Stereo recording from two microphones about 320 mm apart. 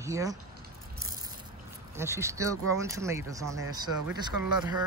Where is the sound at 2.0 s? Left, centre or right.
Centre.